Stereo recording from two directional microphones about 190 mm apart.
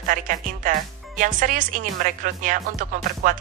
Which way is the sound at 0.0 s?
45° right (ahead or behind).